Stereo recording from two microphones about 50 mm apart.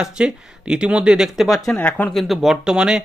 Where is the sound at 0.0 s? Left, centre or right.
Centre.